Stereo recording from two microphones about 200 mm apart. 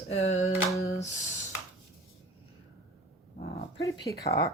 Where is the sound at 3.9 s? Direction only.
20° left (ahead or behind).